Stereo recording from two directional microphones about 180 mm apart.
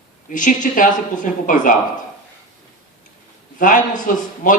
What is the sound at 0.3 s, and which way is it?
A man's voice, 45° left (ahead or behind).